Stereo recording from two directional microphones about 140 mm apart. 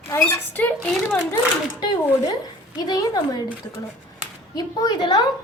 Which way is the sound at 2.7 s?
30° left (ahead or behind).